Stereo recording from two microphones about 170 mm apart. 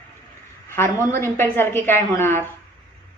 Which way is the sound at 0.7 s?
15° left (ahead or behind).